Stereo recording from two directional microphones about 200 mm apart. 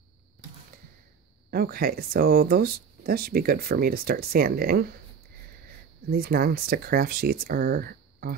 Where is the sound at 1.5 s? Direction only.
50° right (ahead or behind).